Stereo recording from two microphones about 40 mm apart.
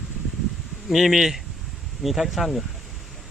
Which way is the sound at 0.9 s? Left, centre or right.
Centre.